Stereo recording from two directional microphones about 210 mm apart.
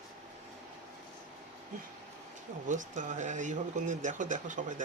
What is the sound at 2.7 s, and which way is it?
Speech, 35° right (ahead or behind).